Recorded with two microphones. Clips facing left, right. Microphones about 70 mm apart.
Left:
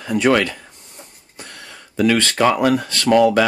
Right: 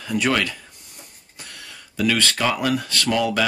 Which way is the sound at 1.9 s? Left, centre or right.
Left.